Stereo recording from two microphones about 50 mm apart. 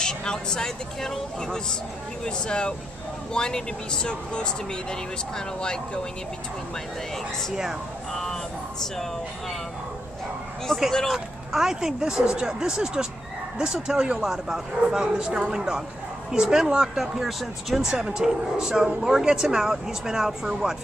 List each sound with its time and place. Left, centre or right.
0.0 s speech: centre
8.1 s speech: centre
10.7 s speech: centre
11.1 s speech: centre